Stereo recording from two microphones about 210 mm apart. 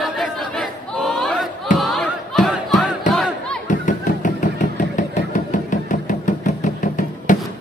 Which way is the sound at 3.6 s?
35° left (ahead or behind).